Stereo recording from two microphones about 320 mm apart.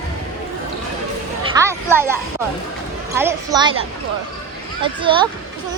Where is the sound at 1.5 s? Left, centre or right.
Centre.